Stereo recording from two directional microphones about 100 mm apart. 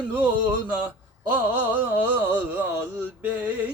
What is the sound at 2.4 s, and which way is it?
Speech, 15° right (ahead or behind).